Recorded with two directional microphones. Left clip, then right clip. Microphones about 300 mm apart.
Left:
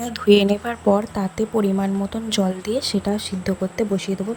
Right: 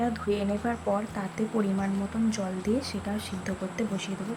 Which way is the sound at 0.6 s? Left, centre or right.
Left.